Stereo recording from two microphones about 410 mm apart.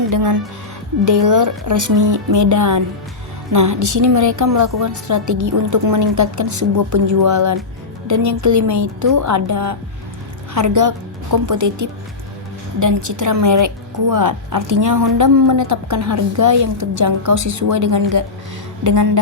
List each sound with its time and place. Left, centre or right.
0.1 s a woman's voice: right